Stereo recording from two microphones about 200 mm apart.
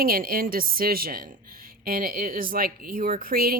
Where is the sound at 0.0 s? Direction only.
45° right (ahead or behind).